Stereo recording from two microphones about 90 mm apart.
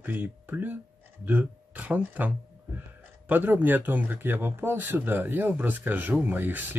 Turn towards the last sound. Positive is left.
turn(degrees=-20)  # may be behind; listen again after turning